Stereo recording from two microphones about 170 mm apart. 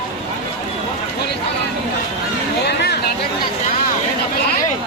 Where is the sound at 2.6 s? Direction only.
75° left (ahead or behind).